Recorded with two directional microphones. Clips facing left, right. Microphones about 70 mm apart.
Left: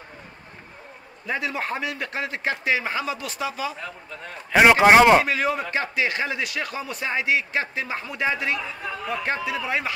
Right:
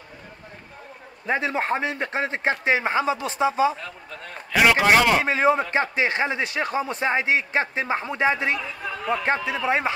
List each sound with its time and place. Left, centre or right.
1.2 s a man's voice: right
4.5 s speech: left
5.2 s a man's voice: right